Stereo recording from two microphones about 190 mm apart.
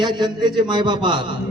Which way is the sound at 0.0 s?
25° right (ahead or behind).